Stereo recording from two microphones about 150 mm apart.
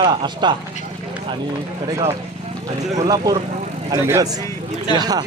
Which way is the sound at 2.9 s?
25° right (ahead or behind).